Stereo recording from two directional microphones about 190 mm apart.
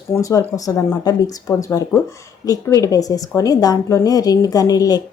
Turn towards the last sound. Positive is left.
turn(degrees=20)  # may be behind; listen again after turning